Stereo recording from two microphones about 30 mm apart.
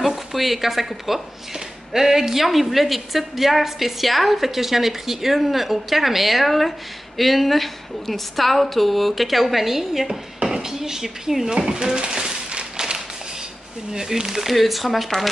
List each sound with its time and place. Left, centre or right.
0.0 s a woman's voice: centre
2.4 s a woman's voice: centre
10.0 s speech: right
13.9 s speech: right
14.5 s a woman's voice: centre